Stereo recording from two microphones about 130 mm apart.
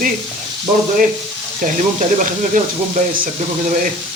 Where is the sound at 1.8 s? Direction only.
70° right (ahead or behind).